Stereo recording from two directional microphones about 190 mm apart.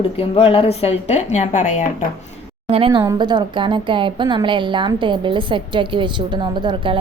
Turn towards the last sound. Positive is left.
turn(degrees=-25)  # may be behind; listen again after turning